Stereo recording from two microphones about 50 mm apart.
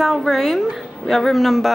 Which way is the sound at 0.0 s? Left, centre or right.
Centre.